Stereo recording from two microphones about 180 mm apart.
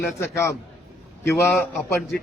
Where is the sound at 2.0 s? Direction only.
Centre (ahead or behind).